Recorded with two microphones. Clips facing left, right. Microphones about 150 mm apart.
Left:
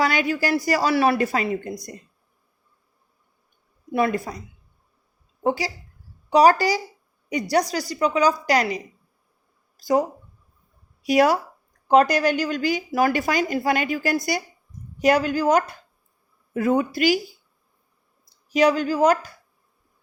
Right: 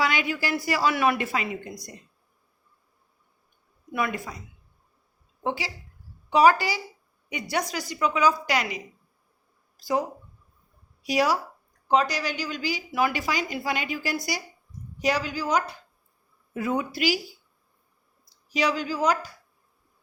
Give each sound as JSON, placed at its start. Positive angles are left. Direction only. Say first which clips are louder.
{"t": 0.0, "sound": "speech", "louder": "left 5 dB", "side_deg": 40}
{"t": 3.9, "sound": "speech", "louder": "left 7 dB", "side_deg": 35}
{"t": 5.4, "sound": "speech", "louder": "left 6 dB", "side_deg": 40}
{"t": 11.0, "sound": "a woman's voice", "louder": "left 6 dB", "side_deg": 55}
{"t": 18.5, "sound": "a woman's voice", "louder": "left 7 dB", "side_deg": 50}